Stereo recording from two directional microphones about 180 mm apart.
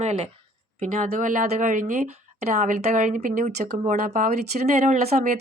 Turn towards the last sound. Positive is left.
turn(degrees=-40)  # may be behind; listen again after turning